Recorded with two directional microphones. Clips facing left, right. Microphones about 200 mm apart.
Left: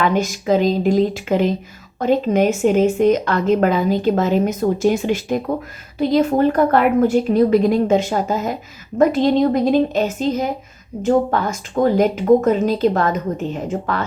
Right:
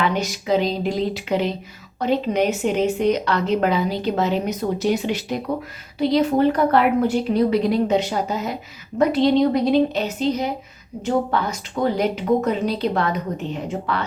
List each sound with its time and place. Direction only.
0.0 s a woman's voice: 45° left (ahead or behind)